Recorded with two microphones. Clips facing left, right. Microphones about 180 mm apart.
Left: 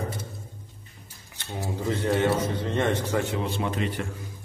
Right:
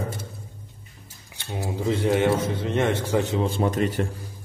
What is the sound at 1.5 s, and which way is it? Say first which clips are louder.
A man's voice: right 3 dB; 15° right (ahead or behind).